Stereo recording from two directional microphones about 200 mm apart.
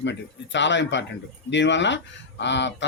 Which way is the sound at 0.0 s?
60° left (ahead or behind).